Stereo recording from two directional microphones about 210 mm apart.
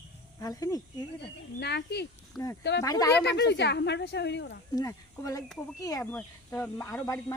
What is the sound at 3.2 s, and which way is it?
Speech, 55° left (ahead or behind).